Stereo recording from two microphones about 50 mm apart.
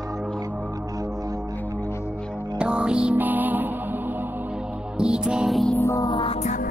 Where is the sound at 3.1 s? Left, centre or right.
Right.